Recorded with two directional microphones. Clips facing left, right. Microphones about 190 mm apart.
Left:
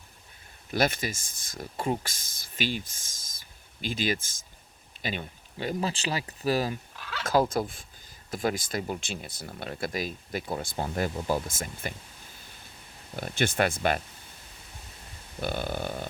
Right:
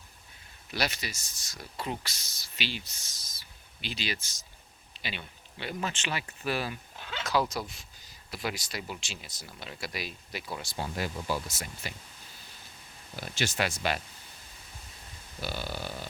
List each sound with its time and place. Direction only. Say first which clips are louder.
0.7 s speech: left 6 dB; 50° left (ahead or behind)
6.9 s fowl: left 1 dB; 25° right (ahead or behind)
7.3 s speech: left 5 dB; 50° left (ahead or behind)
13.1 s speech: left 5 dB; 55° left (ahead or behind)
15.4 s speech: left 5 dB; 55° left (ahead or behind)